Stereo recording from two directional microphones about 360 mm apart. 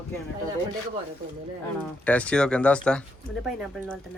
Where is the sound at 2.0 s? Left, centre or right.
Centre.